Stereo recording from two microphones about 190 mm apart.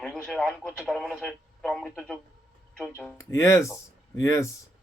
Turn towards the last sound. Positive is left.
turn(degrees=15)  # may be behind; listen again after turning